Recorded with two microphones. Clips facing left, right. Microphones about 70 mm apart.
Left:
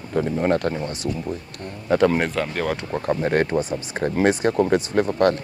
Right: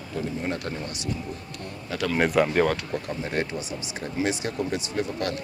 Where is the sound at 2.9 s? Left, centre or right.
Left.